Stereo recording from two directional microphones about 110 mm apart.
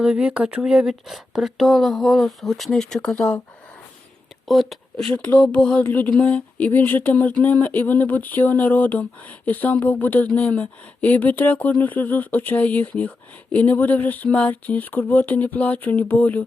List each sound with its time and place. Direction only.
0.0 s speech: 10° right (ahead or behind); by 3.4 s 10° left (ahead or behind)
4.4 s speech: centre (ahead or behind)
5.1 s a sound: 15° left (ahead or behind)